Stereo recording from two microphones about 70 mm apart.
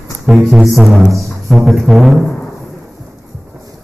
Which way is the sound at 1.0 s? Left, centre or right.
Right.